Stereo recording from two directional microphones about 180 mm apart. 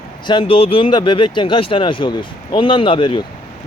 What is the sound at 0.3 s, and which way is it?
Speech, 30° left (ahead or behind).